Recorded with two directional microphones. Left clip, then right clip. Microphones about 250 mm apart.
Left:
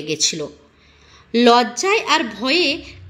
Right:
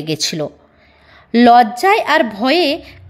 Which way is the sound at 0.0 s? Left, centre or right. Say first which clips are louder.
Right 2 dB; right.